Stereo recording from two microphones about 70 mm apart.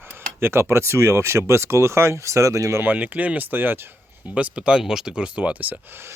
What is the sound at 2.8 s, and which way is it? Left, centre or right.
Speech, right.